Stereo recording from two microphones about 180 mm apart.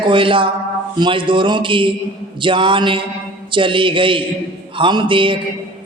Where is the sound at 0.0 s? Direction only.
30° right (ahead or behind).